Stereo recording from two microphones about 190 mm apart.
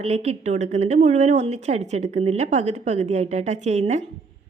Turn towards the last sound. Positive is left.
turn(degrees=-35)  # may be behind; listen again after turning